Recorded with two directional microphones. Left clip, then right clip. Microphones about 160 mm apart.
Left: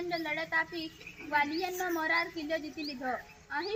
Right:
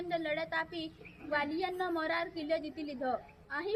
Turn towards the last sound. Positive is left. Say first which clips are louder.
# left 2 dB
turn(degrees=-30)  # may be behind; listen again after turning